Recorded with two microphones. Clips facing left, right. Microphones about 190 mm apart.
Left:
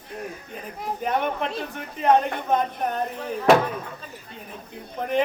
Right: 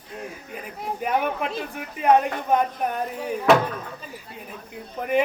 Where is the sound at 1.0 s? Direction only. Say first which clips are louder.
Right 1 dB; 5° right (ahead or behind).